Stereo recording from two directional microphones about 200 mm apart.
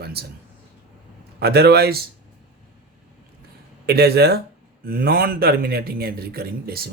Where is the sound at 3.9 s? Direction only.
50° right (ahead or behind).